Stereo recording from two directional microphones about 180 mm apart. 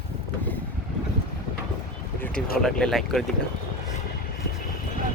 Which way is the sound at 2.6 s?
5° left (ahead or behind).